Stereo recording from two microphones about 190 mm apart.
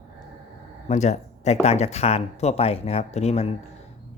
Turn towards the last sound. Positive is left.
turn(degrees=35)  # may be behind; listen again after turning